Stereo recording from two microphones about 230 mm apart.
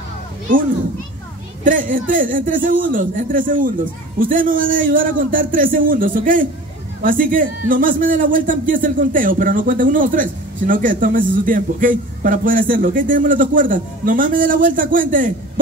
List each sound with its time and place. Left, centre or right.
1.6 s a man's voice: right